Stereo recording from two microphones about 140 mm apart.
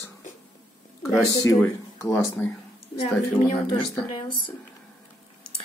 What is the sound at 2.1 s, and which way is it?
Speech, 5° left (ahead or behind).